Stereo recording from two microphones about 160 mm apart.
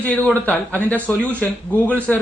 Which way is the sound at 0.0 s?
10° left (ahead or behind).